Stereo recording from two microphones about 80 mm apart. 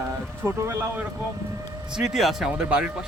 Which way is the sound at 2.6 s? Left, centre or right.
Centre.